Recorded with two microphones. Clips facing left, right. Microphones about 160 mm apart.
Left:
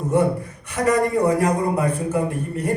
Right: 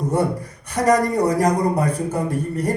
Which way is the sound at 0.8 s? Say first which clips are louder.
Right 1 dB; 40° right (ahead or behind).